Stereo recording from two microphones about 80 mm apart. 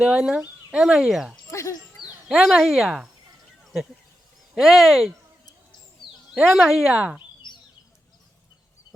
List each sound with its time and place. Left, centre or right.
0.0 s speech: centre
1.5 s goat: left
2.2 s speech: centre
3.6 s a sound: centre
4.5 s speech: centre
6.3 s speech: centre
6.9 s speech: centre
7.4 s a sound: left